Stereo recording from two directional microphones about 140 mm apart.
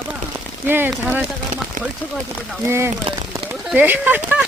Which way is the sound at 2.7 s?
15° right (ahead or behind).